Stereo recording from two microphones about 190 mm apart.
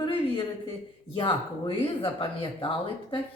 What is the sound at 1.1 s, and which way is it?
Speech, 25° left (ahead or behind).